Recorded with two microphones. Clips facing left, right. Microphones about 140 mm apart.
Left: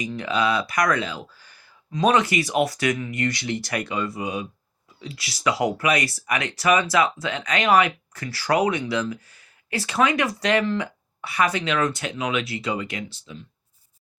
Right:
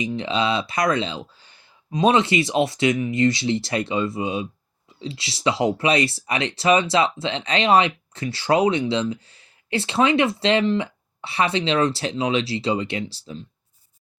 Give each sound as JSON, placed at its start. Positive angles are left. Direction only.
{"t": 0.0, "sound": "speech", "side_deg": -25}